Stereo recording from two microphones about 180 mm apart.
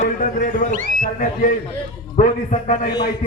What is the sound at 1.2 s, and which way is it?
A man's voice, 45° left (ahead or behind).